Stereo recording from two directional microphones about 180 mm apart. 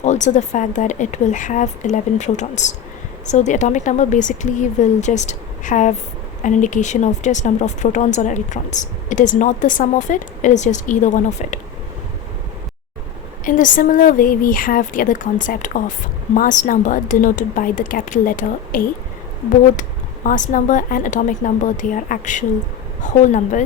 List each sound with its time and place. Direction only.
0.0 s speech: 40° left (ahead or behind)
13.4 s speech: 45° left (ahead or behind)
20.2 s speech: 45° left (ahead or behind)